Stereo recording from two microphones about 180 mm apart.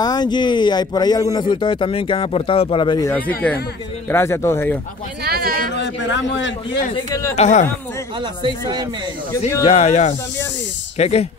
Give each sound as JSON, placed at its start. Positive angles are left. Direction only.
{"t": 0.0, "sound": "speech", "side_deg": 25}
{"t": 3.1, "sound": "a man's voice", "side_deg": 10}
{"t": 5.2, "sound": "a sound", "side_deg": -55}
{"t": 5.8, "sound": "a man's voice", "side_deg": 80}
{"t": 7.1, "sound": "a man's voice", "side_deg": 15}
{"t": 7.3, "sound": "speech", "side_deg": 40}
{"t": 8.5, "sound": "speech", "side_deg": -20}
{"t": 9.7, "sound": "speech", "side_deg": 35}